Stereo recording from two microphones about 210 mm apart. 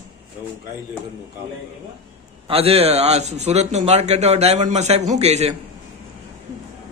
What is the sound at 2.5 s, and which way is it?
A man's voice, 30° right (ahead or behind).